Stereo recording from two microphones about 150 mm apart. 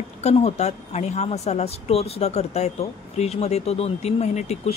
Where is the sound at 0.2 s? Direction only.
45° left (ahead or behind).